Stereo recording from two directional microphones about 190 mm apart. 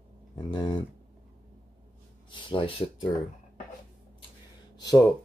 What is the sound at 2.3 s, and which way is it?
Speech, 25° left (ahead or behind).